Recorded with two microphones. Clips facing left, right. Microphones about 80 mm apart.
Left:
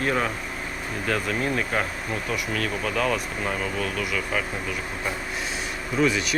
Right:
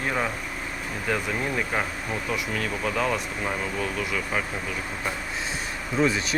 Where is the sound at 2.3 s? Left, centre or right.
Right.